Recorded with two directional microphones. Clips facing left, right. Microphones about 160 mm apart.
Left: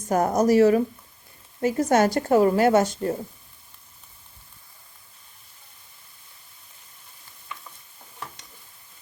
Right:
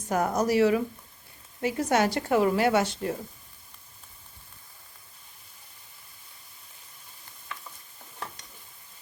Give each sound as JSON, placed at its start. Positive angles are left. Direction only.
{"t": 0.1, "sound": "a woman's voice", "side_deg": 45}